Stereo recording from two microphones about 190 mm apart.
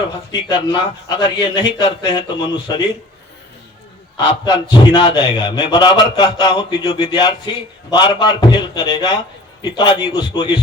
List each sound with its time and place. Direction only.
0.3 s a man's voice: 25° left (ahead or behind)
4.4 s a man's voice: 25° left (ahead or behind)